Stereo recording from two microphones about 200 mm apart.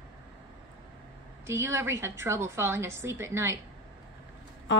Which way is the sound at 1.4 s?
15° right (ahead or behind).